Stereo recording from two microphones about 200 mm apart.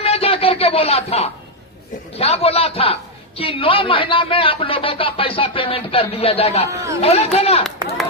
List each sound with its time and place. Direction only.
0.0 s a sound: 30° left (ahead or behind)
2.1 s a man's voice: 30° left (ahead or behind)
6.7 s speech: 15° right (ahead or behind)
7.0 s speech: 30° left (ahead or behind)